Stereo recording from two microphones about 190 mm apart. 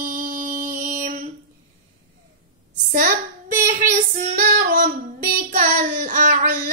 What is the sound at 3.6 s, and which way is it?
Child singing, 50° right (ahead or behind).